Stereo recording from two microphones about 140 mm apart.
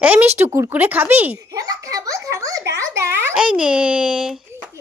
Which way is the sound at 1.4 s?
25° right (ahead or behind).